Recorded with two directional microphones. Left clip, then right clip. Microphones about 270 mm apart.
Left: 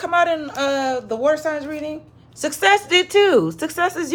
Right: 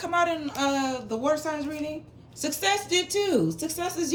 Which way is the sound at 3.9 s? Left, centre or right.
Left.